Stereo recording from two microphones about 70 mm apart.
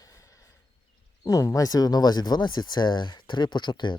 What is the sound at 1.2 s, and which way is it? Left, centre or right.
Speech, left.